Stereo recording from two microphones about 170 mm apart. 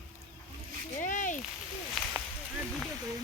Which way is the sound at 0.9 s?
45° left (ahead or behind).